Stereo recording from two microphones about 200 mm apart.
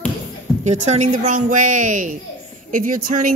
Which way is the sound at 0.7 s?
35° right (ahead or behind).